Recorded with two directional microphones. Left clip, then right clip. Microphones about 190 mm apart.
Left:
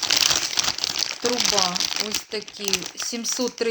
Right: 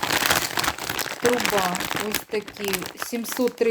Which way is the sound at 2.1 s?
15° right (ahead or behind).